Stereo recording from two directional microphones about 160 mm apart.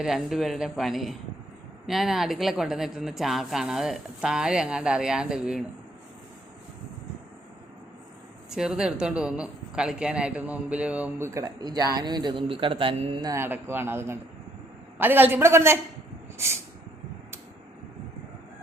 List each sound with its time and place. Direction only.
0.0 s speech: 5° right (ahead or behind)
8.4 s a man's voice: 5° right (ahead or behind); by 13.3 s 30° right (ahead or behind)
13.3 s speech: 15° right (ahead or behind)